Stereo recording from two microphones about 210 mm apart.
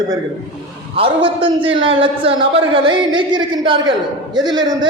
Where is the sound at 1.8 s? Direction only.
25° right (ahead or behind).